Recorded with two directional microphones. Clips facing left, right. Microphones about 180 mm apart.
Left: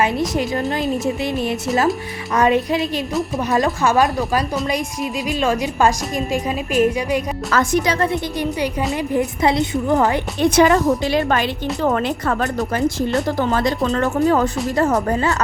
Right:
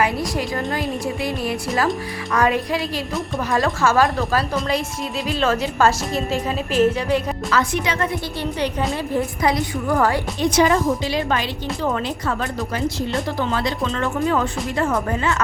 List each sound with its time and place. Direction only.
0.0 s a woman's voice: 20° left (ahead or behind)
5.3 s a woman's voice: 15° left (ahead or behind)
7.5 s speech: 40° left (ahead or behind)
8.1 s a woman's voice: 15° left (ahead or behind)
9.1 s a woman's voice: 25° left (ahead or behind)
10.4 s a woman's voice: 55° left (ahead or behind); by 15.4 s 40° left (ahead or behind)